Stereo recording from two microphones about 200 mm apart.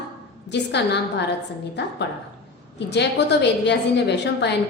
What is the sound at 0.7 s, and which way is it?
Speech, 60° left (ahead or behind).